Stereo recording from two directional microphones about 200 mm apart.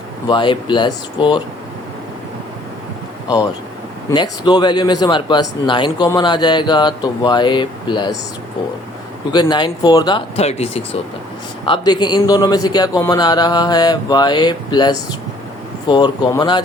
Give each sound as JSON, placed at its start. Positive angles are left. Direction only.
{"t": 0.3, "sound": "a man's voice", "side_deg": 25}
{"t": 4.1, "sound": "a man's voice", "side_deg": 20}
{"t": 9.3, "sound": "a man's voice", "side_deg": 20}